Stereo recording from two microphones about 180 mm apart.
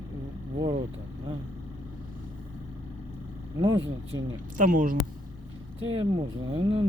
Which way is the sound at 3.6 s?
25° right (ahead or behind).